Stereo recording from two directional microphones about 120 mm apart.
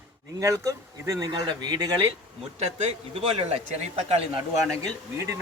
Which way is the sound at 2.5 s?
65° right (ahead or behind).